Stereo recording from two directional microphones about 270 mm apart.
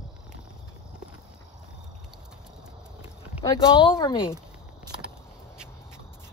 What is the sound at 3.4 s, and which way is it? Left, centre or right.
Speech, centre.